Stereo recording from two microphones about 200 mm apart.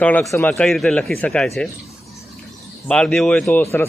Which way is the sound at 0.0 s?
5° left (ahead or behind).